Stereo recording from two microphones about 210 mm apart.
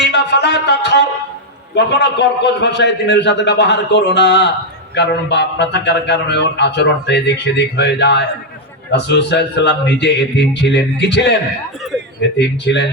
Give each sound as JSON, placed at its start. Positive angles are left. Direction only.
{"t": 0.1, "sound": "music", "side_deg": 55}
{"t": 1.7, "sound": "a man's voice", "side_deg": 55}
{"t": 12.4, "sound": "music", "side_deg": 55}